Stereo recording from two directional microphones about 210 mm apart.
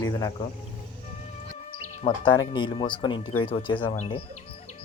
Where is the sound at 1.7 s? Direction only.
35° left (ahead or behind).